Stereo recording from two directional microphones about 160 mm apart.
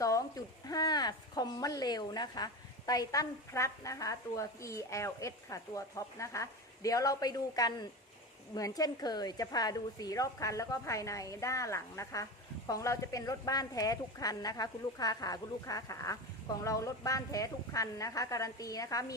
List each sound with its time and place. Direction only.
0.0 s speech: 20° left (ahead or behind)